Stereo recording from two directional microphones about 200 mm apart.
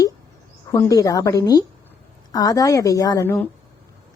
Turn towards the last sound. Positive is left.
turn(degrees=15)  # may be behind; listen again after turning